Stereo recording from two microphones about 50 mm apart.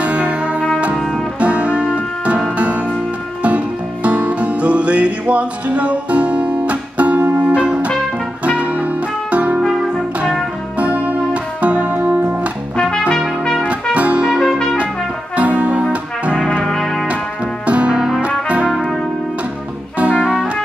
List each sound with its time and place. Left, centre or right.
0.0 s music: right
0.9 s music: centre
1.4 s music: right
7.2 s music: right
7.5 s music: right
10.8 s music: right
13.4 s trumpet: centre
13.9 s music: right
15.3 s music: right
16.6 s music: centre
17.6 s music: right
20.0 s music: right